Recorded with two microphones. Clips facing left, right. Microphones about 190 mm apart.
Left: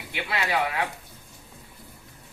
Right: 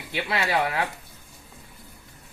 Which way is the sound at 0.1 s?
30° right (ahead or behind).